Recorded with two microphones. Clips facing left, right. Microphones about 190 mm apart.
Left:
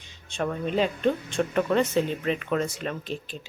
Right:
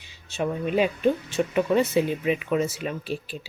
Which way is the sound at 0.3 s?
5° right (ahead or behind).